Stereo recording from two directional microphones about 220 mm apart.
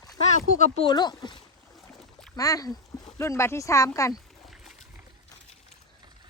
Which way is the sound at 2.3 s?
15° left (ahead or behind).